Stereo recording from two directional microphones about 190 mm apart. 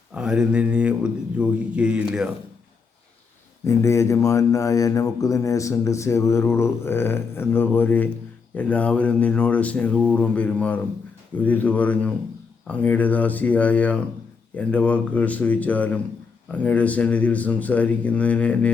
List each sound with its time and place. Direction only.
0.1 s a man's voice: 5° right (ahead or behind)
3.7 s speech: 15° left (ahead or behind)